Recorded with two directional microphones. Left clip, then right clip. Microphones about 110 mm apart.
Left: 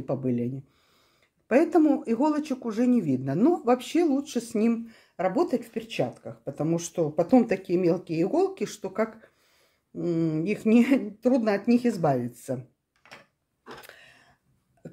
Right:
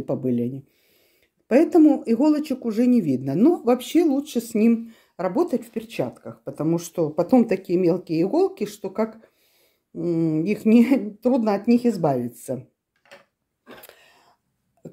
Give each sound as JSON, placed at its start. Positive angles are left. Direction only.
{"t": 0.0, "sound": "speech", "side_deg": -55}
{"t": 1.5, "sound": "speech", "side_deg": -50}
{"t": 13.8, "sound": "throat clearing", "side_deg": -40}